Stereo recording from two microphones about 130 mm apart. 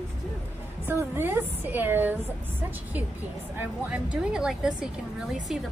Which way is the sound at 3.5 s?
15° right (ahead or behind).